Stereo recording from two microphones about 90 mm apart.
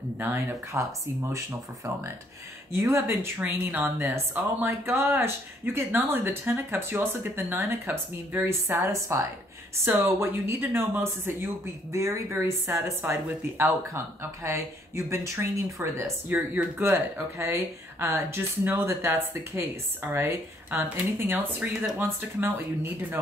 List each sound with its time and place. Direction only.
0.2 s speech: 25° right (ahead or behind)
2.7 s speech: 30° right (ahead or behind)